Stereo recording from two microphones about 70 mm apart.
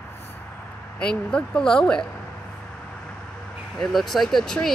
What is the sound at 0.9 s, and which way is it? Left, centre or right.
Speech, centre.